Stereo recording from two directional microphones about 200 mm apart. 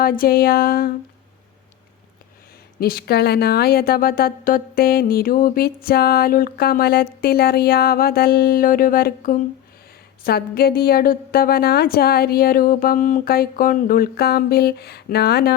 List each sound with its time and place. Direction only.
0.0 s a woman's voice: 45° left (ahead or behind)
2.8 s a woman's voice: 50° left (ahead or behind)